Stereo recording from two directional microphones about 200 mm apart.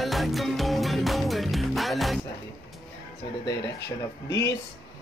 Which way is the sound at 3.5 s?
60° left (ahead or behind).